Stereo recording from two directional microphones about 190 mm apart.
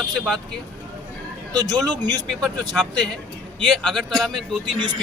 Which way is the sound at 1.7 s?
20° right (ahead or behind).